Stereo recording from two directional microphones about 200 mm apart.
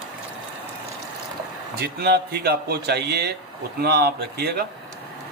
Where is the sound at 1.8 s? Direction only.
50° right (ahead or behind).